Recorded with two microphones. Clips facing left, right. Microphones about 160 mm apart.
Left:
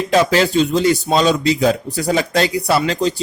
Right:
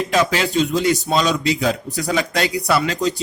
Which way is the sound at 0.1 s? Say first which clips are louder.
Left 6 dB; 35° left (ahead or behind).